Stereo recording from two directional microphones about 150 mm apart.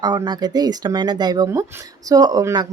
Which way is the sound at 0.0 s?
30° right (ahead or behind).